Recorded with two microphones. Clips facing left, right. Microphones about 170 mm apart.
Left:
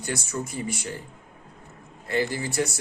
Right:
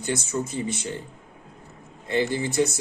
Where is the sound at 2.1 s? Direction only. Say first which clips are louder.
Right 2 dB; 20° right (ahead or behind).